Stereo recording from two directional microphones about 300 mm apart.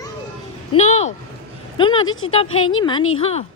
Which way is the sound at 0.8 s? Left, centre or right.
Left.